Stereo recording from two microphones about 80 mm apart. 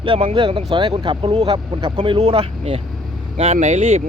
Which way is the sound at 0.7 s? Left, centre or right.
Right.